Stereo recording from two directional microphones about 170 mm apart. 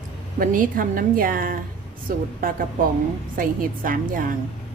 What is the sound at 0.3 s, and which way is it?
A woman's voice, 55° right (ahead or behind).